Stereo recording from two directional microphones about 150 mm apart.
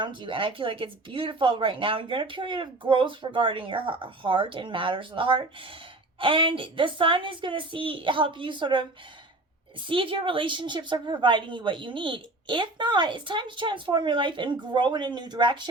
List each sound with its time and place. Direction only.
0.0 s a woman's voice: 35° right (ahead or behind)